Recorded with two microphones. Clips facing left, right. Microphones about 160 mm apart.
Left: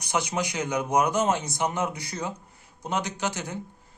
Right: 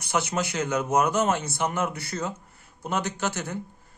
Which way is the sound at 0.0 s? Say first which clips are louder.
Right 1 dB; 15° left (ahead or behind).